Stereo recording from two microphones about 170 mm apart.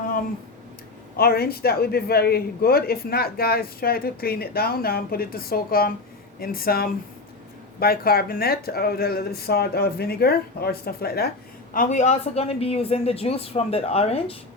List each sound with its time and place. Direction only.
1.1 s a man's voice: 65° left (ahead or behind)
11.7 s a woman's voice: 50° left (ahead or behind)